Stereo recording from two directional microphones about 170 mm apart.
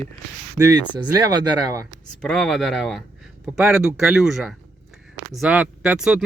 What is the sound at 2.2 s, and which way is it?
Speech, 5° left (ahead or behind).